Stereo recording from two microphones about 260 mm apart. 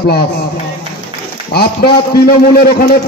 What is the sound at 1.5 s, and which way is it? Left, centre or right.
A man's voice, left.